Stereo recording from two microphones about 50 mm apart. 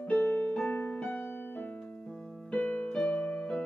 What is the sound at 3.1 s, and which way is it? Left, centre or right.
Music, left.